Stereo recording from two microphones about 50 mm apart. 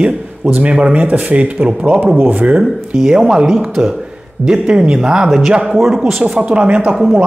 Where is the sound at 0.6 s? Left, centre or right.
Right.